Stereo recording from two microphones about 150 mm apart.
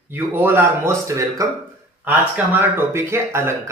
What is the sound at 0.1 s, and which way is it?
Speech, 15° right (ahead or behind).